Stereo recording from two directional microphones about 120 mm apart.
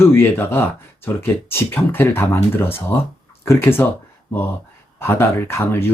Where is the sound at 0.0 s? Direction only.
20° left (ahead or behind).